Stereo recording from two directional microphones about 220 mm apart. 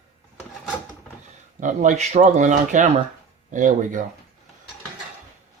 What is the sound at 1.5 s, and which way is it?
Speech, 35° right (ahead or behind).